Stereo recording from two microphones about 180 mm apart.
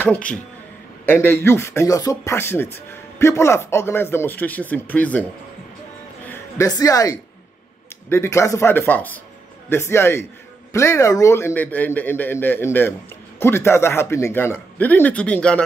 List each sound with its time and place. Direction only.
0.0 s speech: 10° left (ahead or behind)
6.2 s speech: 15° left (ahead or behind)